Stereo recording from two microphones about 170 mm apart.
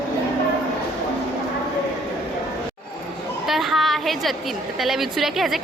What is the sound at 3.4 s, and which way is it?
A woman's voice, centre (ahead or behind).